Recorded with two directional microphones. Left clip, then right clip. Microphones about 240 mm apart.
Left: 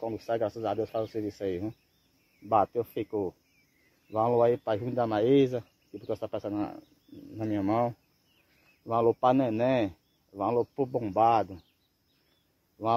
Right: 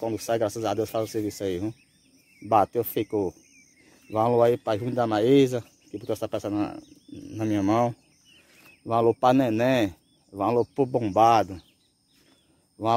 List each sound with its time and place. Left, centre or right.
0.0 s speech: centre